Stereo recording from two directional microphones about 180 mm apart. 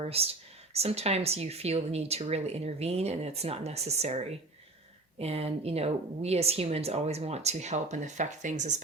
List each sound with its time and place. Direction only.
0.0 s speech: 35° right (ahead or behind)